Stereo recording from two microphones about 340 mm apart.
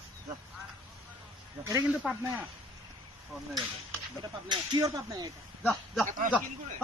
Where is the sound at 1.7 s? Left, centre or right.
Centre.